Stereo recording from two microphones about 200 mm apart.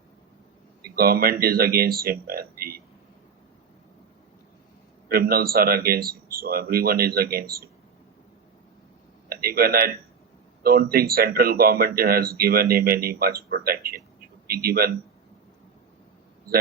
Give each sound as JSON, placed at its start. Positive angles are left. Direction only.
{"t": 0.8, "sound": "speech", "side_deg": -50}
{"t": 5.0, "sound": "speech", "side_deg": -50}
{"t": 9.3, "sound": "speech", "side_deg": -50}